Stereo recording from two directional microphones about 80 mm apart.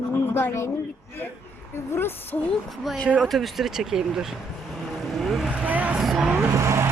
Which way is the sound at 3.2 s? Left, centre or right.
Centre.